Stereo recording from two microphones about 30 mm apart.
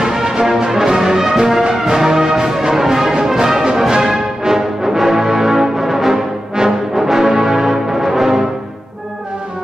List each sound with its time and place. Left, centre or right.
0.0 s music: centre
0.7 s brass instrument: centre
6.5 s brass instrument: right